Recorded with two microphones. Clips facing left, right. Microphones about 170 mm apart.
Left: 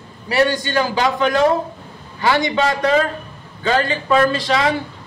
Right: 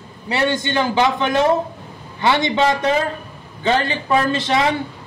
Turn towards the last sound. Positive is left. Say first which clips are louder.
# left 1 dB
turn(degrees=-20)  # may be behind; listen again after turning